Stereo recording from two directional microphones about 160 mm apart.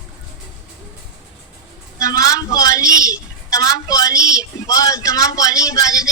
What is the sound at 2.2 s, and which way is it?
A woman's voice, 20° left (ahead or behind).